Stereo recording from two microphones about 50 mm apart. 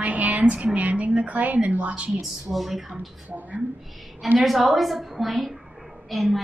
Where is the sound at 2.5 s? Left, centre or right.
Centre.